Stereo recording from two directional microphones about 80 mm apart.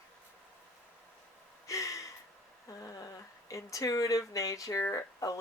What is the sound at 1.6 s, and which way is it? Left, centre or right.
Gasp, left.